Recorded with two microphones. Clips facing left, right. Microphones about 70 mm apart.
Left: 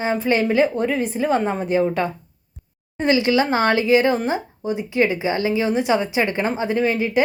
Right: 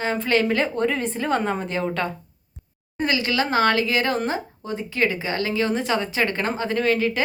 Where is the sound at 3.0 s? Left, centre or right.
Left.